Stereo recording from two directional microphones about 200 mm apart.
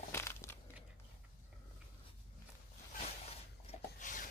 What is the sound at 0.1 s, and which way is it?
Crushing, 10° left (ahead or behind).